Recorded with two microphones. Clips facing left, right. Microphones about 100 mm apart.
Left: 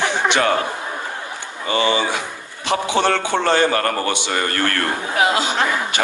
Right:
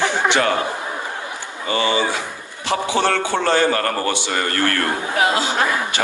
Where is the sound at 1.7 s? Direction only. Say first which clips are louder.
Left 1 dB; 20° left (ahead or behind).